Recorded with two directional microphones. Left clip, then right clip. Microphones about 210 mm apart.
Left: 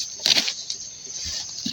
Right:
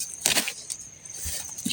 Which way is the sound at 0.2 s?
15° right (ahead or behind).